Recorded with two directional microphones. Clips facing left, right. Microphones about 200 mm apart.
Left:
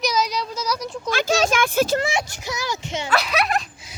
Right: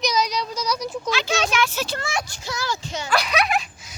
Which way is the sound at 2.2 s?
20° left (ahead or behind).